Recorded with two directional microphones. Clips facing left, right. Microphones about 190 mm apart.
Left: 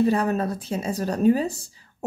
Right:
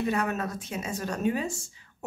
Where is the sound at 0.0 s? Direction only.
35° left (ahead or behind).